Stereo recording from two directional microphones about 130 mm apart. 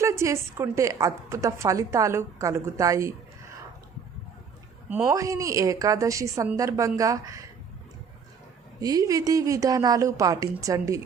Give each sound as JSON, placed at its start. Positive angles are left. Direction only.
{"t": 0.0, "sound": "a woman's voice", "side_deg": -20}
{"t": 5.0, "sound": "a woman's voice", "side_deg": -25}
{"t": 8.8, "sound": "a woman's voice", "side_deg": -30}